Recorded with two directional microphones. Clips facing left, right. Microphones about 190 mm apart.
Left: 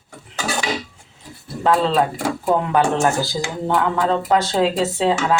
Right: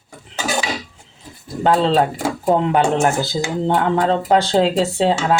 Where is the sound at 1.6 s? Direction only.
30° right (ahead or behind).